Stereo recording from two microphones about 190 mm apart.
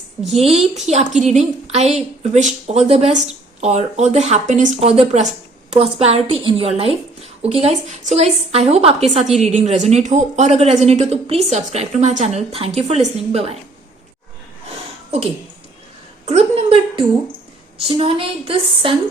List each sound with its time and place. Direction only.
0.2 s a woman's voice: centre (ahead or behind)
0.9 s a woman's voice: 35° right (ahead or behind)
16.2 s a sound: 35° right (ahead or behind)
17.8 s speech: 30° right (ahead or behind)